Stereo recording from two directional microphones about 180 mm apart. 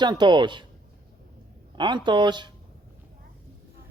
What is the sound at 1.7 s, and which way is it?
Speech, 25° right (ahead or behind).